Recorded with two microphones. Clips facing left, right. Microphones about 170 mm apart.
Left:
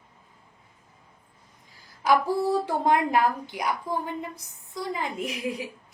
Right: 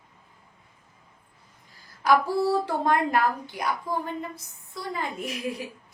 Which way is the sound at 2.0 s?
20° left (ahead or behind).